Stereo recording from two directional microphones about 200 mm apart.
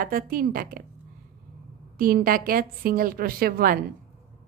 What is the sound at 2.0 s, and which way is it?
A woman's voice, 45° right (ahead or behind).